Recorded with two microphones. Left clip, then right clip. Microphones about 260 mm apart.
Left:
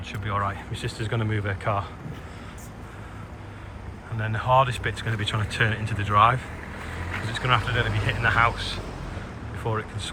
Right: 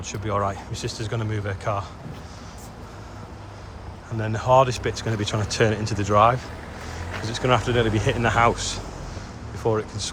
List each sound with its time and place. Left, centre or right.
0.0 s speech: right
4.2 s speech: right